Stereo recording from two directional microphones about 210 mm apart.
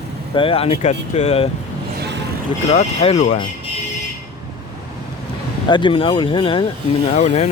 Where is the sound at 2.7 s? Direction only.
30° left (ahead or behind).